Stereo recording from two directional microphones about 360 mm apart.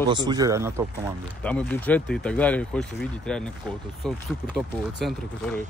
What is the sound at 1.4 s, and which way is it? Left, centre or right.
Speech, centre.